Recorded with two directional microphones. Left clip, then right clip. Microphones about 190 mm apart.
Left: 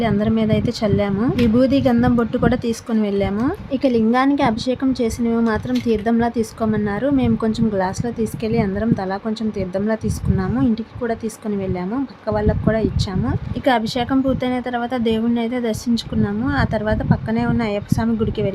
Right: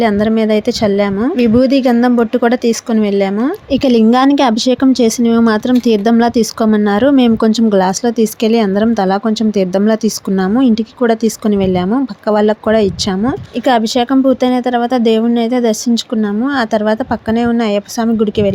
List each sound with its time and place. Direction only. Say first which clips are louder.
0.0 s a woman's voice: right 7 dB; 30° right (ahead or behind)
3.7 s a woman's voice: right 8 dB; 40° right (ahead or behind)